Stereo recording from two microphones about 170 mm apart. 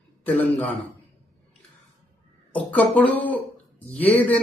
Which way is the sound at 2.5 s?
10° left (ahead or behind).